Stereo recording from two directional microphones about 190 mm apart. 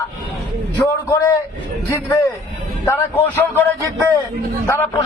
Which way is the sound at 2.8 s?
10° left (ahead or behind).